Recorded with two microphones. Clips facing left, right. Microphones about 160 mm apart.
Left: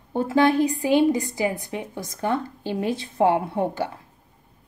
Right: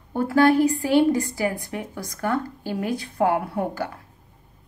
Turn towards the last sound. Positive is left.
turn(degrees=25)  # may be behind; listen again after turning